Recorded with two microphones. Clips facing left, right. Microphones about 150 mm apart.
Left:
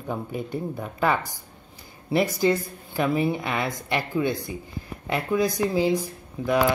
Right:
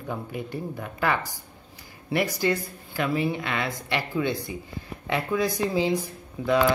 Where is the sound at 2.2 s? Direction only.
20° left (ahead or behind).